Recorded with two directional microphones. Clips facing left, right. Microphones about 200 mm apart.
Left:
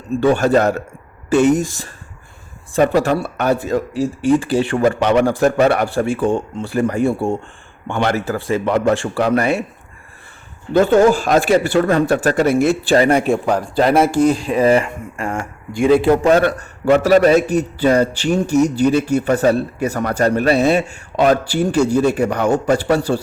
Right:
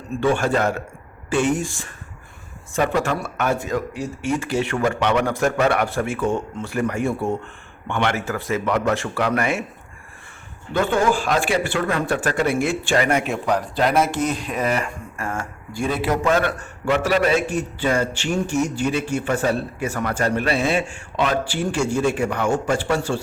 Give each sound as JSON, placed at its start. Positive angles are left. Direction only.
{"t": 0.2, "sound": "a man's voice", "side_deg": 40}
{"t": 2.9, "sound": "a man's voice", "side_deg": 35}
{"t": 10.8, "sound": "a man's voice", "side_deg": 40}
{"t": 16.0, "sound": "a man's voice", "side_deg": 35}